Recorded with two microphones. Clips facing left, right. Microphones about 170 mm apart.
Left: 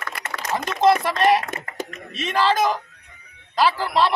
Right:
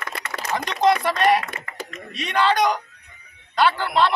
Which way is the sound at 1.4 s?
45° left (ahead or behind).